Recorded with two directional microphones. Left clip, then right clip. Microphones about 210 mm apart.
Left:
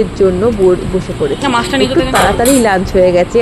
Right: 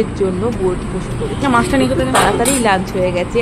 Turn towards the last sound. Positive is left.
turn(degrees=15)  # may be behind; listen again after turning